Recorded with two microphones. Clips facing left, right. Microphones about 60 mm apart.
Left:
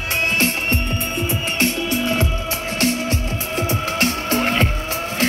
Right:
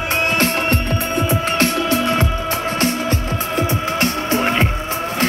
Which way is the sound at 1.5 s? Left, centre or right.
Right.